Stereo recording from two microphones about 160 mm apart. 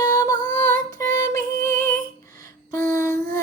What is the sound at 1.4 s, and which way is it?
Music, 60° right (ahead or behind).